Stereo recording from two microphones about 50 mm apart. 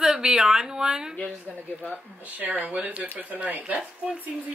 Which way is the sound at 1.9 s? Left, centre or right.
Right.